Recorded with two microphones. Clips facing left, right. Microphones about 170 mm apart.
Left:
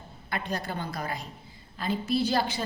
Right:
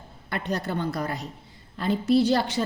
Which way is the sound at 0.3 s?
65° right (ahead or behind).